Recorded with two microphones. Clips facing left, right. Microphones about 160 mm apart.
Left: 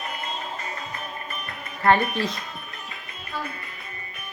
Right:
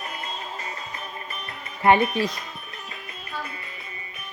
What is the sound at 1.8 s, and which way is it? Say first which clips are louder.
Speech: right 2 dB; 15° right (ahead or behind).